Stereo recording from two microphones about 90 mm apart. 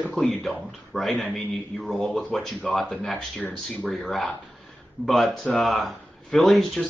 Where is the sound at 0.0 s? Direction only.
10° left (ahead or behind).